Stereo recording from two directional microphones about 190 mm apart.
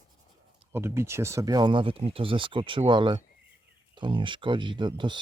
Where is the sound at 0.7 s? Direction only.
15° right (ahead or behind).